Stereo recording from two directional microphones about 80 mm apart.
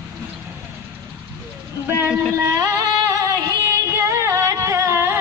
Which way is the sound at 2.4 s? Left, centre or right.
Right.